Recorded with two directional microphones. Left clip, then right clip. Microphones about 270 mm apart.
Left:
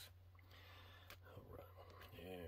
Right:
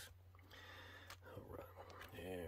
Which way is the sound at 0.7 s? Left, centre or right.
Centre.